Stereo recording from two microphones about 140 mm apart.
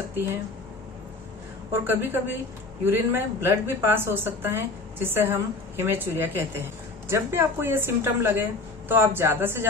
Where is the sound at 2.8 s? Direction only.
15° right (ahead or behind).